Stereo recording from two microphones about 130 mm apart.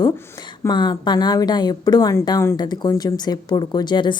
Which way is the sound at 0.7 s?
35° left (ahead or behind).